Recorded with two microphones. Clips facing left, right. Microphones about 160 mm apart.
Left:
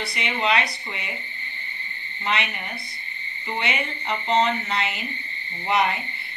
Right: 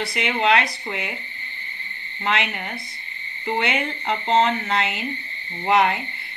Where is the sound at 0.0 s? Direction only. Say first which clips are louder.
Right 4 dB; 85° right.